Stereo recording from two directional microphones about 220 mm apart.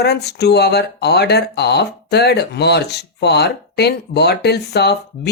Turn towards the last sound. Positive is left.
turn(degrees=50)  # may be behind; listen again after turning